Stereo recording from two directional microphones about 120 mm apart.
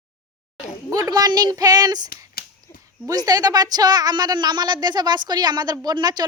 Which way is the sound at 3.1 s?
30° right (ahead or behind).